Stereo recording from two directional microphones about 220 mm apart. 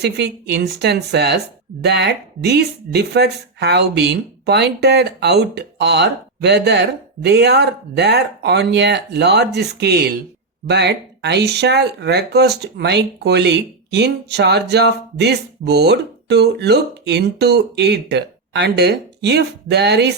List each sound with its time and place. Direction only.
0.0 s speech: 50° right (ahead or behind)